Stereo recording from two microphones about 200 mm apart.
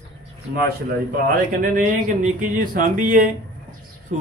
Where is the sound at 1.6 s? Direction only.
45° right (ahead or behind).